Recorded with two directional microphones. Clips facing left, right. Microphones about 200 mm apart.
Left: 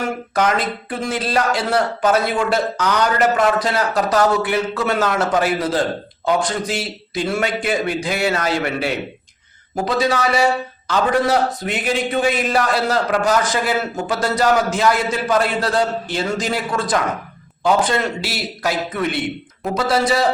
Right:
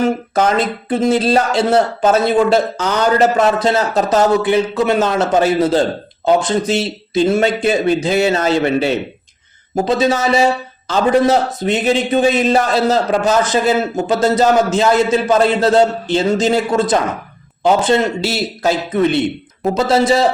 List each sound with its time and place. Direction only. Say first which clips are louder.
0.3 s a man's voice: right 1 dB; 25° right (ahead or behind)